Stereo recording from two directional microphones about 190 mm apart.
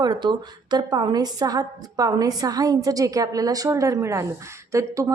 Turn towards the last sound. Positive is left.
turn(degrees=-15)  # may be behind; listen again after turning